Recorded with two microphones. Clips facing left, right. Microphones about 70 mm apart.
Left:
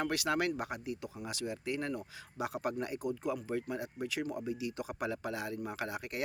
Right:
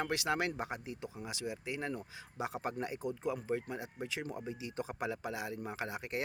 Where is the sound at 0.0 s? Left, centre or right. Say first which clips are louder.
Left 2 dB; right.